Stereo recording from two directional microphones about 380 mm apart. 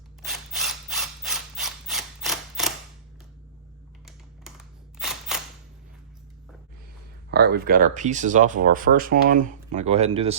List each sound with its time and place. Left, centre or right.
0.2 s filing: centre
4.9 s single-lens reflex camera: centre
7.3 s speech: right